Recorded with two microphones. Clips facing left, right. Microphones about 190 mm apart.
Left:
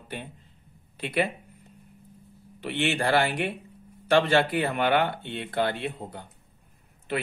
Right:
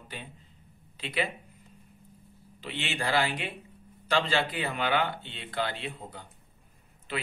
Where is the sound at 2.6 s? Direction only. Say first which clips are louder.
Left 8 dB; 65° left (ahead or behind).